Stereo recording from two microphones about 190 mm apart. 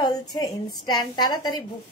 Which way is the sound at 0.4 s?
20° left (ahead or behind).